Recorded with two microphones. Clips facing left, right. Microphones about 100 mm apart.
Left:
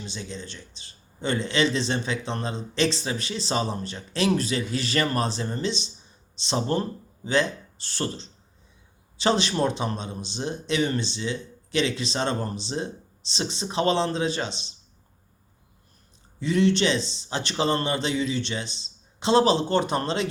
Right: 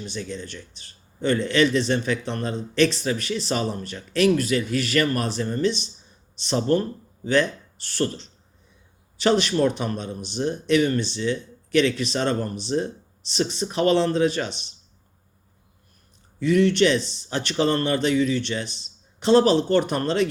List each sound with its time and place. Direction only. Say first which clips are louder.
0.3 s speech: right 3 dB; 25° left (ahead or behind)
7.9 s speech: right 5 dB; 25° left (ahead or behind)
16.4 s speech: right 3 dB; 25° left (ahead or behind)